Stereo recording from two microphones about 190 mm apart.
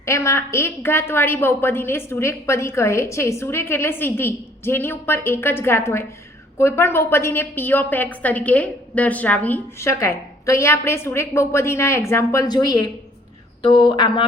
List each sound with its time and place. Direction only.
0.0 s a woman's voice: 15° left (ahead or behind)